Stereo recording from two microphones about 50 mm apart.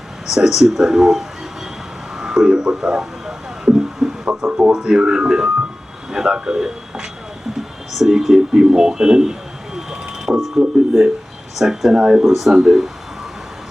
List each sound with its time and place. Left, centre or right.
0.3 s a man's voice: centre
2.1 s radio: centre
4.4 s a man's voice: centre
7.5 s a sound: centre
11.5 s a man's voice: centre